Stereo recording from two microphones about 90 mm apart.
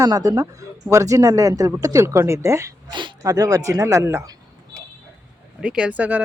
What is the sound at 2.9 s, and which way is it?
Speech, 60° right (ahead or behind).